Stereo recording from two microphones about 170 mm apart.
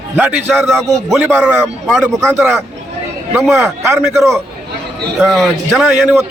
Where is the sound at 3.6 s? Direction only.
15° right (ahead or behind).